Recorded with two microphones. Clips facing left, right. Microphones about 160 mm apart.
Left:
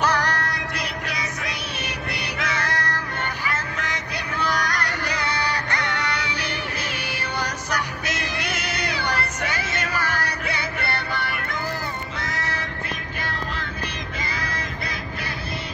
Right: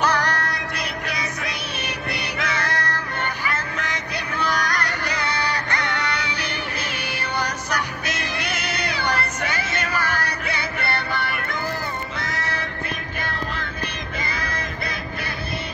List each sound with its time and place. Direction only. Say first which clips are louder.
0.0 s music: right 1 dB; 65° right (ahead or behind)